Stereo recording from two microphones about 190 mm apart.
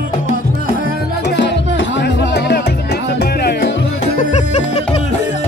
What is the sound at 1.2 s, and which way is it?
Music, 65° left (ahead or behind).